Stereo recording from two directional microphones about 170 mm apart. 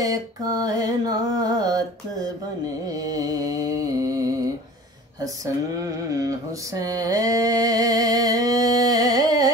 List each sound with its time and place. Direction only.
0.0 s music: 20° right (ahead or behind)
5.2 s mantra: 20° right (ahead or behind)